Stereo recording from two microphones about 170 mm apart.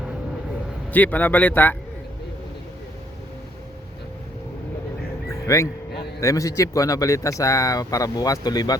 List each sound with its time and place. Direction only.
0.9 s a man's voice: 10° left (ahead or behind)
5.3 s a sound: 20° left (ahead or behind)
6.1 s speech: 20° left (ahead or behind)